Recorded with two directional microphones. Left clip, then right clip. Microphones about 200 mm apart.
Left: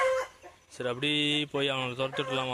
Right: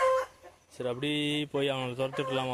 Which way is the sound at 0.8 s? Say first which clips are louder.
Left 3 dB; 10° right (ahead or behind).